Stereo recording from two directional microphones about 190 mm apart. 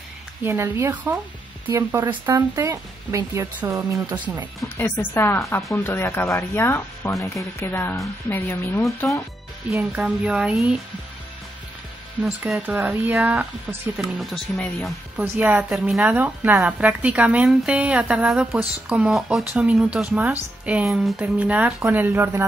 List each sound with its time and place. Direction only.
0.4 s speech: 15° right (ahead or behind)
4.7 s speech: 15° left (ahead or behind)
9.7 s speech: 5° right (ahead or behind)
12.2 s speech: 5° right (ahead or behind)